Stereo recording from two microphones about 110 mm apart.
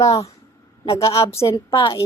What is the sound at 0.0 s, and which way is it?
A woman's voice, 30° left (ahead or behind).